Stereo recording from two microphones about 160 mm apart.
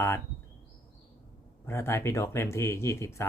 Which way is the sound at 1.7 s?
15° left (ahead or behind).